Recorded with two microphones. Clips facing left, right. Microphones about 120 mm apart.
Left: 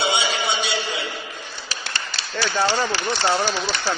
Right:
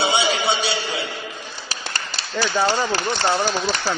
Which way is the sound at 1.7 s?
40° right (ahead or behind).